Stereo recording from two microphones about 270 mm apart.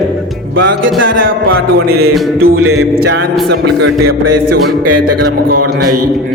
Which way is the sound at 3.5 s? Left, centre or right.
Right.